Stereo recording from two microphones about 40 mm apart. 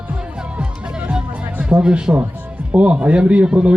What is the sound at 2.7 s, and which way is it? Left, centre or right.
A man's voice, right.